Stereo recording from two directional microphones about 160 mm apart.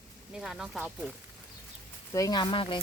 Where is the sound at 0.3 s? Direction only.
Centre (ahead or behind).